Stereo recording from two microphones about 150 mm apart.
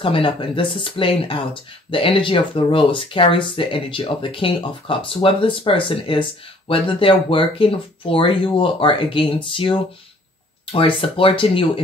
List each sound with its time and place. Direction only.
0.0 s speech: 35° left (ahead or behind)